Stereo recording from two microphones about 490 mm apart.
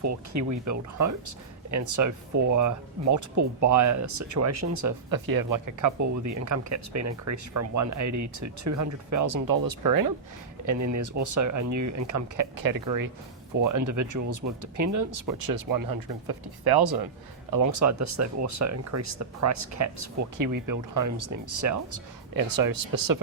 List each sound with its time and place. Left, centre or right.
0.0 s speech: right
17.5 s speech: right